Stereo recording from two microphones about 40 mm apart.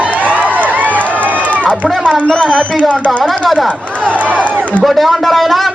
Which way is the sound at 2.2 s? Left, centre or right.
Left.